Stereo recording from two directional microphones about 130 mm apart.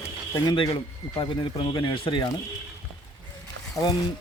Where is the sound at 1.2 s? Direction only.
40° left (ahead or behind).